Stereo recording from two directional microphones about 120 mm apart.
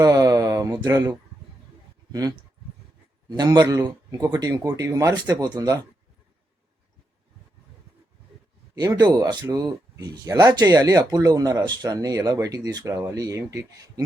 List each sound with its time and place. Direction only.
0.0 s a sound: 30° right (ahead or behind)
3.2 s speech: 35° right (ahead or behind)
8.7 s speech: 35° right (ahead or behind)